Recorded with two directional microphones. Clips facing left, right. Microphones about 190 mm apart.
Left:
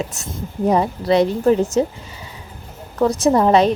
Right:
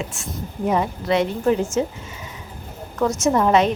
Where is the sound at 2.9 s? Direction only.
35° left (ahead or behind).